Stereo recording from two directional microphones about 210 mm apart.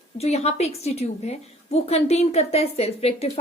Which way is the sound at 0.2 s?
30° left (ahead or behind).